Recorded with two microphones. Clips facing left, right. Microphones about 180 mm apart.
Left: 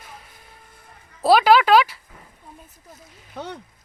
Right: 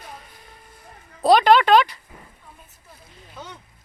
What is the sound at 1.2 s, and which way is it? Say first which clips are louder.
Speech: even; 5° left (ahead or behind).